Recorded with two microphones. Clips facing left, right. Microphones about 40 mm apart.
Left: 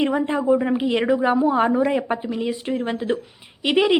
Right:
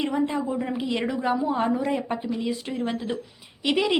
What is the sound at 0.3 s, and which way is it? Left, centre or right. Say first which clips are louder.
A woman's voice: left 8 dB; left.